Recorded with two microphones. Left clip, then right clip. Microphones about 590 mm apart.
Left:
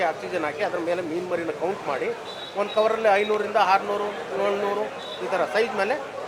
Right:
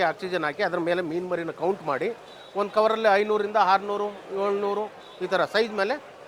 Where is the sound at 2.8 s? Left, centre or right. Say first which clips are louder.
Even; right.